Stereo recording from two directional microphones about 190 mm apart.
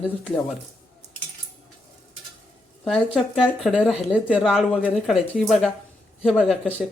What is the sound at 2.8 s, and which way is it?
Speech, centre (ahead or behind).